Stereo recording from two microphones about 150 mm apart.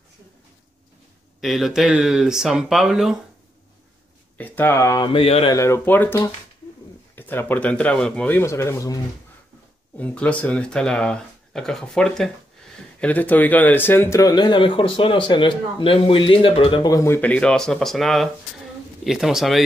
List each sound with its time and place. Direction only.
1.4 s speech: centre (ahead or behind)
4.4 s speech: 10° left (ahead or behind)
5.0 s mantra: 40° left (ahead or behind)
5.5 s a man's voice: 20° left (ahead or behind)
9.9 s speech: 10° left (ahead or behind)